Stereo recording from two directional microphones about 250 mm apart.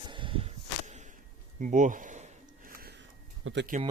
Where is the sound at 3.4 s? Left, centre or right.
Right.